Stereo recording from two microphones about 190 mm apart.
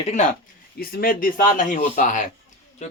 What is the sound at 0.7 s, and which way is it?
Speech, 50° left (ahead or behind).